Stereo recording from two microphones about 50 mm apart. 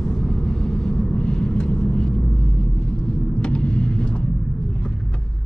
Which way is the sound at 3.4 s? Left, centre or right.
Centre.